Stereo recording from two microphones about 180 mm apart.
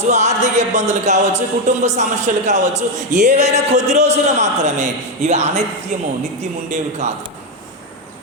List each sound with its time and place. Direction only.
0.0 s speech: 40° right (ahead or behind)